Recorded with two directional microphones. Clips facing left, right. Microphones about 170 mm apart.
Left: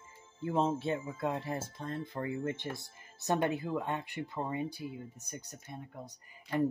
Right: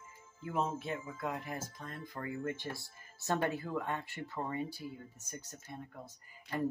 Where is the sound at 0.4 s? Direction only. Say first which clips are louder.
Left 5 dB; 25° left (ahead or behind).